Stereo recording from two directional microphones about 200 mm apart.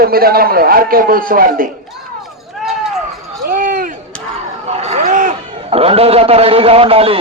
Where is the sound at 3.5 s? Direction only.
45° right (ahead or behind).